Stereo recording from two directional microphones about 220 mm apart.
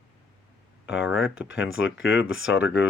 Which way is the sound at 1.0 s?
5° right (ahead or behind).